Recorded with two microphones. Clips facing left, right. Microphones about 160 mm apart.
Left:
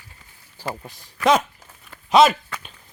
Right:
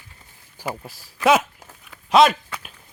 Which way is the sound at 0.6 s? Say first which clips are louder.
Right 1 dB; 5° right (ahead or behind).